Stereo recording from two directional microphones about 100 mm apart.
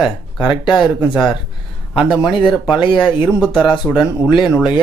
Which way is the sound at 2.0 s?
Centre (ahead or behind).